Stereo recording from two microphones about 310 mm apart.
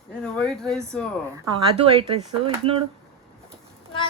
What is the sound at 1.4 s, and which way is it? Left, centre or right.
A woman's voice, centre.